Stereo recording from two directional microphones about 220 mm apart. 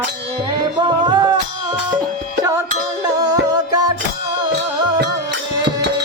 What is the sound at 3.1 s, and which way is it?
Music, 20° right (ahead or behind).